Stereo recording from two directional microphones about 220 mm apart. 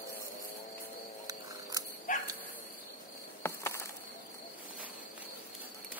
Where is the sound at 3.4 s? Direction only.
10° left (ahead or behind).